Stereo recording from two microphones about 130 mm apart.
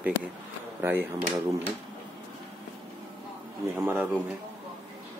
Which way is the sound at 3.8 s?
15° right (ahead or behind).